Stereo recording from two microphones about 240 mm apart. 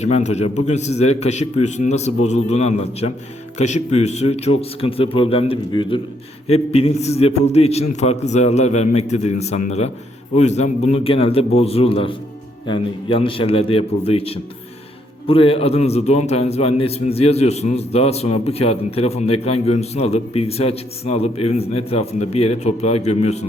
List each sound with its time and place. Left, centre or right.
0.0 s a man's voice: left